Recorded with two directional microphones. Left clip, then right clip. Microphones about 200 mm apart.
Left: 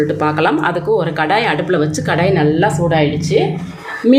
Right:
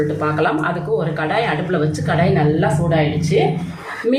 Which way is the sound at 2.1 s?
50° left (ahead or behind).